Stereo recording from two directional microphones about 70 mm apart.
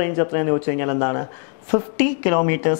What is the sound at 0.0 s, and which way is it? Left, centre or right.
Speech, left.